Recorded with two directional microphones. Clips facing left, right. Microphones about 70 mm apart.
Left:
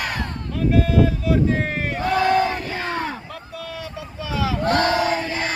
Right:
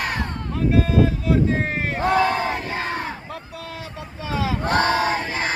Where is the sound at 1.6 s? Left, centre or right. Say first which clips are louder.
Right 1 dB; right.